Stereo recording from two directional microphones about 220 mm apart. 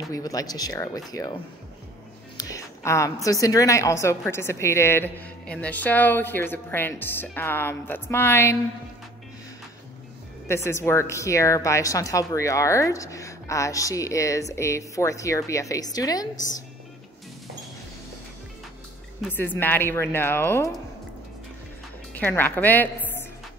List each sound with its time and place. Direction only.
0.1 s a woman's voice: 15° left (ahead or behind)
2.3 s a woman's voice: 15° left (ahead or behind)
10.5 s a woman's voice: 10° left (ahead or behind)
19.3 s a woman's voice: 10° left (ahead or behind)
22.1 s a woman's voice: 10° left (ahead or behind)